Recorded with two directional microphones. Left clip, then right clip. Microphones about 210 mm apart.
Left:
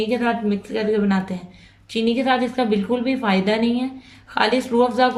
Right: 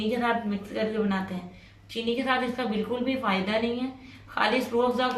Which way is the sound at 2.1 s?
50° left (ahead or behind).